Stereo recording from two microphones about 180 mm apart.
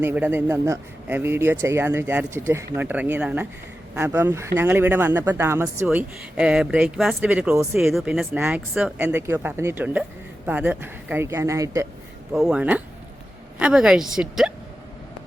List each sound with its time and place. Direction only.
0.0 s speech: 10° right (ahead or behind)
7.5 s speech: 15° right (ahead or behind)
7.8 s speech: centre (ahead or behind); by 11.9 s 15° right (ahead or behind)
12.3 s speech: 5° right (ahead or behind)